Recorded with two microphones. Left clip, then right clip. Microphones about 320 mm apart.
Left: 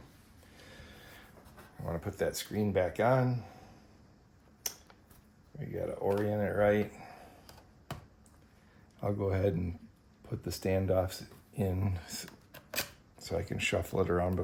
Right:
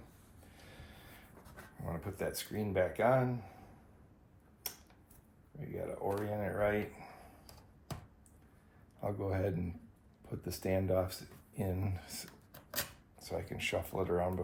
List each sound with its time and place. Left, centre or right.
0.5 s music: left
1.8 s speech: left
5.5 s speech: left
9.0 s speech: left
12.5 s a sound: centre
13.1 s speech: left